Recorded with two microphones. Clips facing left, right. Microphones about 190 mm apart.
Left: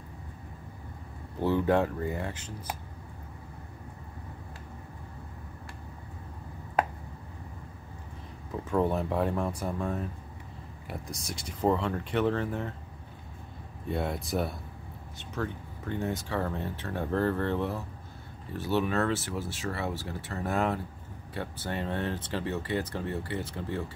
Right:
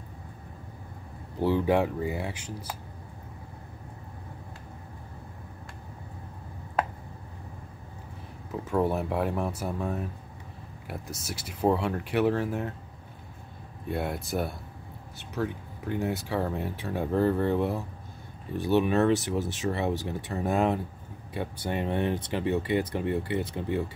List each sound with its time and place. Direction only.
1.4 s speech: 10° right (ahead or behind)
8.6 s speech: 5° right (ahead or behind)
13.8 s speech: centre (ahead or behind)